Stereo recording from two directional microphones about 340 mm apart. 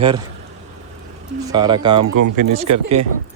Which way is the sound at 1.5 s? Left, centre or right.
Centre.